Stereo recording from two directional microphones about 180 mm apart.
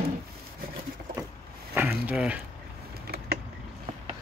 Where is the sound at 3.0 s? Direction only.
60° right (ahead or behind).